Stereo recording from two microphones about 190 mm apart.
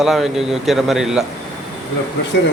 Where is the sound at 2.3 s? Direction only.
65° left (ahead or behind).